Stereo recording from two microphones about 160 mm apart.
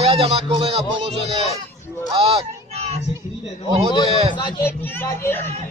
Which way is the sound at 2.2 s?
40° right (ahead or behind).